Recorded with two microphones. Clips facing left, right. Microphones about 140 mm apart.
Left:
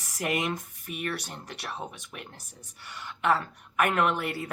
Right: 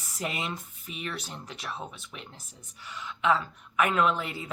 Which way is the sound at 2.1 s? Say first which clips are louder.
Left 1 dB; 50° left (ahead or behind).